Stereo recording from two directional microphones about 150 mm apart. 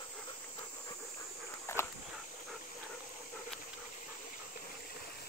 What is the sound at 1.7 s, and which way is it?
Dog, 15° left (ahead or behind).